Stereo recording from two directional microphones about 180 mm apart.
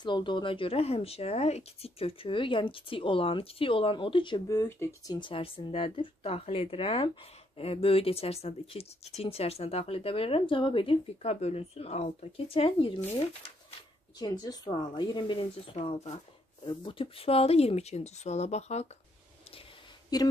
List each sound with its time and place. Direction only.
0.0 s speech: 25° left (ahead or behind)
20.1 s speech: 20° left (ahead or behind)